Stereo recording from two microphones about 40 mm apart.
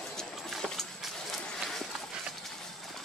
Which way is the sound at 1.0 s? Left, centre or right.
Centre.